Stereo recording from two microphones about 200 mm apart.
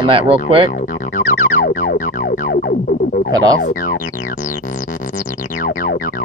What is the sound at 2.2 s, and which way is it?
Music, 40° left (ahead or behind).